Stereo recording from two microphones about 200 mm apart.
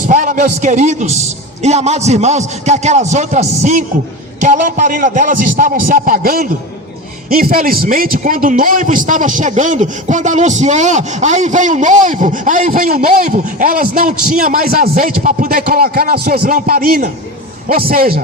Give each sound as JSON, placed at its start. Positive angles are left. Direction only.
{"t": 0.1, "sound": "a man's voice", "side_deg": -40}